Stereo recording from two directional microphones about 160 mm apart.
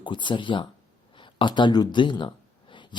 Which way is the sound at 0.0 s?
30° left (ahead or behind).